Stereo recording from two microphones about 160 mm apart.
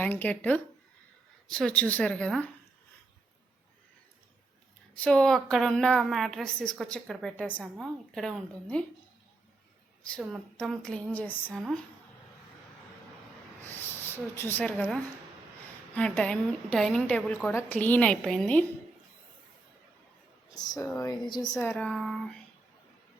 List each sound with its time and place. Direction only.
0.0 s a woman's voice: 10° left (ahead or behind)
4.9 s a woman's voice: 5° left (ahead or behind)
10.2 s a woman's voice: centre (ahead or behind)
13.7 s a woman's voice: 15° left (ahead or behind)
20.6 s speech: 25° left (ahead or behind)
21.6 s a woman's voice: 10° left (ahead or behind)